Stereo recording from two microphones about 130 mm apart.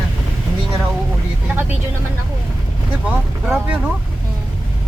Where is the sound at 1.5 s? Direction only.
15° right (ahead or behind).